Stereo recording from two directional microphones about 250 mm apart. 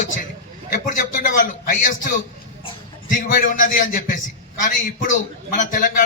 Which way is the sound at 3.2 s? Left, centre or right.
Left.